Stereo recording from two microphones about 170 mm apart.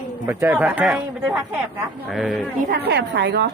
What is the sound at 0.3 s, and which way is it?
Speech, 10° right (ahead or behind).